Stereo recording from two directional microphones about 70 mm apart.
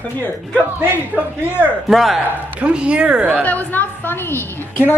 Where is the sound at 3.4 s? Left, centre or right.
Left.